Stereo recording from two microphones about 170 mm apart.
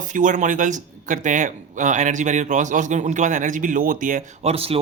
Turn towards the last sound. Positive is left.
turn(degrees=-35)  # may be behind; listen again after turning